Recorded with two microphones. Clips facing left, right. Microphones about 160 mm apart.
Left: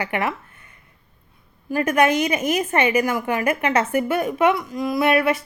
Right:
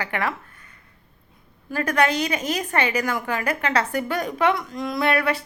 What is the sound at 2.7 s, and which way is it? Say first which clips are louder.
A woman's voice: left 3 dB; 20° left (ahead or behind).